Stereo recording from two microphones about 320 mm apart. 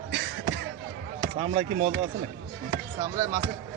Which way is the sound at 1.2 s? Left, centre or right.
Centre.